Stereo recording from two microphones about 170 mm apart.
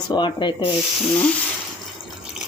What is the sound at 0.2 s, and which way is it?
Speech, 25° left (ahead or behind).